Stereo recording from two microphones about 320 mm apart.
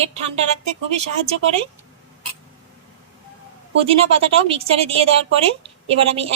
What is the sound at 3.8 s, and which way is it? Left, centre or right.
A woman's voice, centre.